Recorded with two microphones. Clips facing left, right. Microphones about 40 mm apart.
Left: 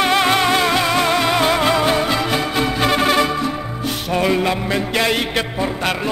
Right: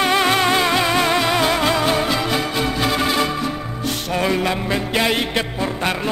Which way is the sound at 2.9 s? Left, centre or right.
Left.